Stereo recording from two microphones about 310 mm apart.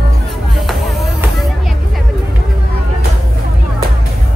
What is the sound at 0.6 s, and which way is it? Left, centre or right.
Music, centre.